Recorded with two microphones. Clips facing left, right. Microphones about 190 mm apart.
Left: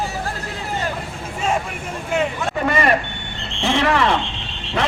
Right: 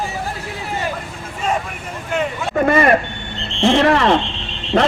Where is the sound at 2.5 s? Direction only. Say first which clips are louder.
Right 6 dB; 50° right (ahead or behind).